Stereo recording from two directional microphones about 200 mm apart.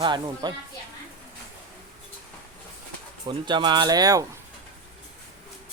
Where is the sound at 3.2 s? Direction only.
20° right (ahead or behind).